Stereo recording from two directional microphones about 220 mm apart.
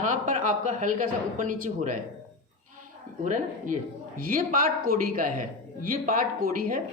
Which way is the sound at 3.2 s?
35° right (ahead or behind).